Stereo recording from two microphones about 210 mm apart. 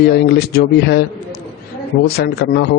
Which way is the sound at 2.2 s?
55° left (ahead or behind).